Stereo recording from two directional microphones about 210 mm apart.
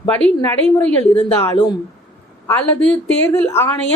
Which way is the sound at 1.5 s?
20° left (ahead or behind).